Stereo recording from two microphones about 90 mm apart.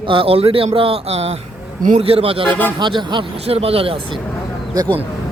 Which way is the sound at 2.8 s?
55° right (ahead or behind).